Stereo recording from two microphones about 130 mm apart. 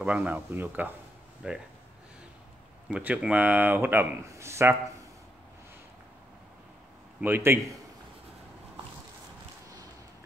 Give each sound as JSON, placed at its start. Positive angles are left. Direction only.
{"t": 0.0, "sound": "speech", "side_deg": -10}
{"t": 2.9, "sound": "speech", "side_deg": -10}
{"t": 7.2, "sound": "speech", "side_deg": -15}